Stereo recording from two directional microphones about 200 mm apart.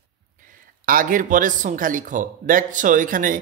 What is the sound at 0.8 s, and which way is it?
A man's voice, 45° right (ahead or behind).